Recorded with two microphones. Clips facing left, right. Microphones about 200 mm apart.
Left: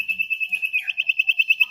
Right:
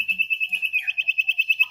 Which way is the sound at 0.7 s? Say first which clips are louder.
Even; 15° right (ahead or behind).